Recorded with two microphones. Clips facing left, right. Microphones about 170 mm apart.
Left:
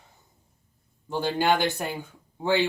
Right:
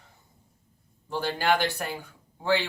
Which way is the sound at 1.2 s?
20° left (ahead or behind).